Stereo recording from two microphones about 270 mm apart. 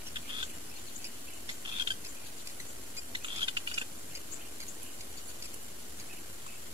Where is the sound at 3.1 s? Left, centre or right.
Centre.